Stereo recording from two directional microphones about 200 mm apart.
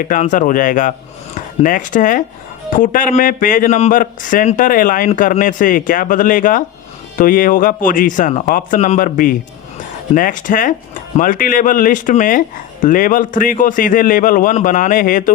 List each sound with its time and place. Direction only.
0.0 s a man's voice: 40° left (ahead or behind)